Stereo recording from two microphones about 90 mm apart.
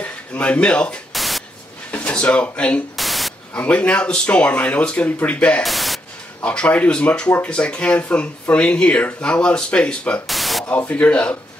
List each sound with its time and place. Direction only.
0.0 s speech: 15° left (ahead or behind)
1.1 s static: centre (ahead or behind)
1.9 s speech: 15° left (ahead or behind)
3.0 s static: centre (ahead or behind)
3.5 s speech: 15° left (ahead or behind)
5.6 s a sound: centre (ahead or behind)
6.4 s speech: 10° left (ahead or behind)
10.2 s a sound: centre (ahead or behind)
10.9 s speech: 15° left (ahead or behind)